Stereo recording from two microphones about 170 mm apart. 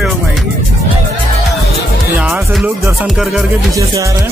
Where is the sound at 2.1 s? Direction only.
10° right (ahead or behind).